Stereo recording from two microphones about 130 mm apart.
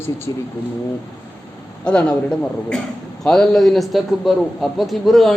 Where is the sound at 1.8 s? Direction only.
5° left (ahead or behind).